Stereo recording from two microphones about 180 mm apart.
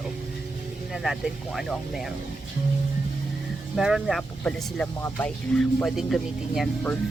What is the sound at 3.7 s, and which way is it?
Speech, 5° right (ahead or behind).